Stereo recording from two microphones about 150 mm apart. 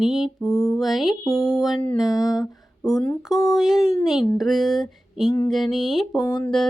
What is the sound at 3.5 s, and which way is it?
Mantra, centre (ahead or behind).